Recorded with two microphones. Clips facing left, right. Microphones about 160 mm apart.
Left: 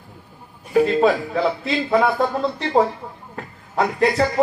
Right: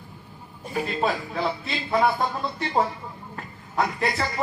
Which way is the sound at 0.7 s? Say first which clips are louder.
Left 10 dB; 65° left (ahead or behind).